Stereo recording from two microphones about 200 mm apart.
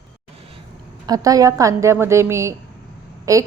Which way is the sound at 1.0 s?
20° right (ahead or behind).